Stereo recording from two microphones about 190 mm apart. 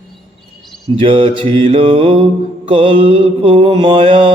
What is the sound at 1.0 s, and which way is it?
Mantra, 25° right (ahead or behind).